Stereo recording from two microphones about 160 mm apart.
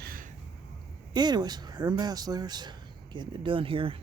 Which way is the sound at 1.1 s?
25° right (ahead or behind).